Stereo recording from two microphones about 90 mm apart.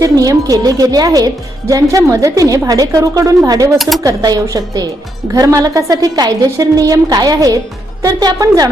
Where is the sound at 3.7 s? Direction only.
Centre (ahead or behind).